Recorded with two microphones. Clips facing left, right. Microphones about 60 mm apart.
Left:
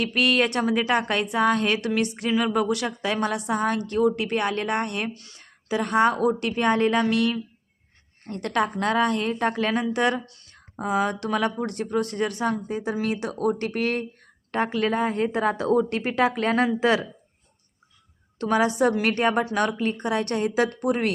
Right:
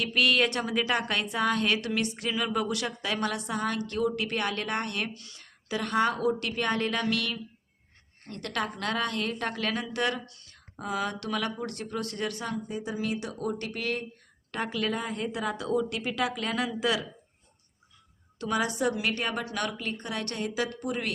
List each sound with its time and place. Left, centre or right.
0.0 s a woman's voice: left
12.5 s a woman's voice: left
18.3 s a woman's voice: left